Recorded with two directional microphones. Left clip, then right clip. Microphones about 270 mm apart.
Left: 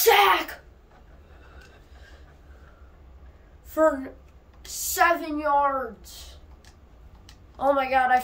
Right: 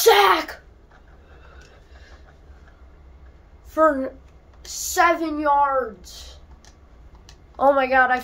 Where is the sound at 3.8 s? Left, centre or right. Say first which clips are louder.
Right 3 dB; centre.